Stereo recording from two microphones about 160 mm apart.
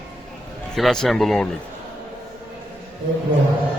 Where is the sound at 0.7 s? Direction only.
5° left (ahead or behind).